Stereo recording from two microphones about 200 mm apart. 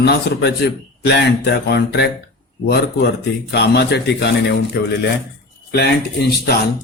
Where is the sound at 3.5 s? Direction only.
55° left (ahead or behind).